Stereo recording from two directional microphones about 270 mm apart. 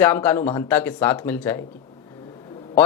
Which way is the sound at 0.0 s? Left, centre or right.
Centre.